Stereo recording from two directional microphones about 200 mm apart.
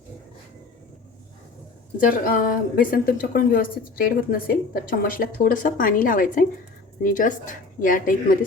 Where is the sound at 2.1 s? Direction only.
45° left (ahead or behind).